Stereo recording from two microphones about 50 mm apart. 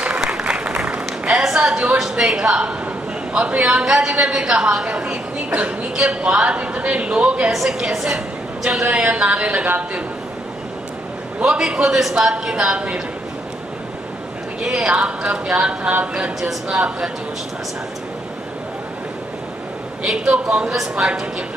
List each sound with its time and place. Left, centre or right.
0.2 s applause: centre
0.5 s applause: right
3.3 s a woman's voice: right
3.6 s a woman's voice: centre
7.5 s a woman's voice: centre; by 10.0 s right
11.4 s a woman's voice: centre
14.6 s a woman's voice: centre
15.9 s speech: right
16.3 s a woman's voice: centre
20.1 s a woman's voice: centre